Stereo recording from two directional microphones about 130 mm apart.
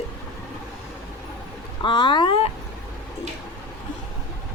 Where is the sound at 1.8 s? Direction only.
35° left (ahead or behind).